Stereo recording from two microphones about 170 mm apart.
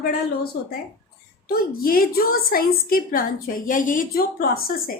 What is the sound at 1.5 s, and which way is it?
A woman's voice, 60° left (ahead or behind).